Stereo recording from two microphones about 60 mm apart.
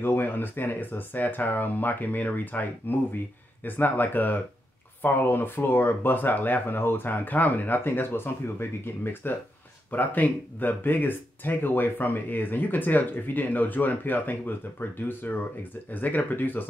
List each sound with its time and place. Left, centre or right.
0.0 s speech: left